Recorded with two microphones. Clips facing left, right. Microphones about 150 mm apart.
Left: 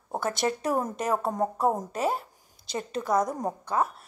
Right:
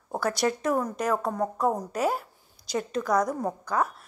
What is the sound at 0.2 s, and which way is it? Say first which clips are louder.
A woman's voice: right 2 dB; 25° left (ahead or behind).